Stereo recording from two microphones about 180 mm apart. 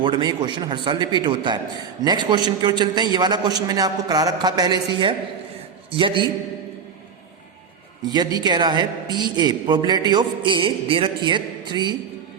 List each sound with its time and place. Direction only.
0.0 s a man's voice: 25° right (ahead or behind)
8.0 s a man's voice: 20° right (ahead or behind)